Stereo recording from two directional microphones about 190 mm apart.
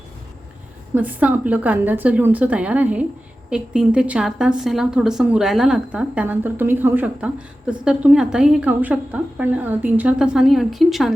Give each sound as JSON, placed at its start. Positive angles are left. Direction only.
{"t": 0.9, "sound": "a woman's voice", "side_deg": -10}